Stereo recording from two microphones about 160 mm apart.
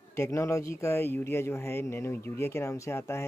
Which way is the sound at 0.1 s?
20° left (ahead or behind).